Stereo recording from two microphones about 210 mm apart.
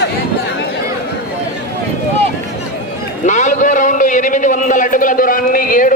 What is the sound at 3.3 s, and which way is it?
A man's voice, 35° left (ahead or behind).